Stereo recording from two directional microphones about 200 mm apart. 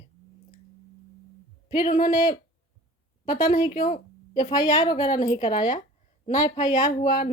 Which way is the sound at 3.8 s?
40° left (ahead or behind).